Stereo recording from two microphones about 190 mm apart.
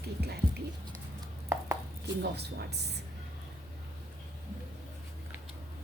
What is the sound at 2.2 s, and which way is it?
Speech, 60° right (ahead or behind).